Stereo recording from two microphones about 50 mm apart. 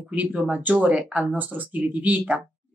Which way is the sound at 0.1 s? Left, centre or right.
Right.